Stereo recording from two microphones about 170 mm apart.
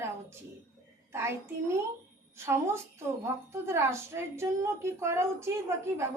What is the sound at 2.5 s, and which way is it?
A woman's voice, 15° right (ahead or behind).